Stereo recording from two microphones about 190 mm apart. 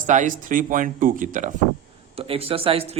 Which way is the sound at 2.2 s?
30° right (ahead or behind).